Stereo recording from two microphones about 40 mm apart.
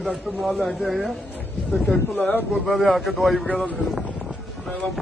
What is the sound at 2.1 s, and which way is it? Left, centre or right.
Speech, left.